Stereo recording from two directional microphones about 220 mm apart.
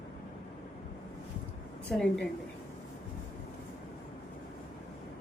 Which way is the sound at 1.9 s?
5° left (ahead or behind).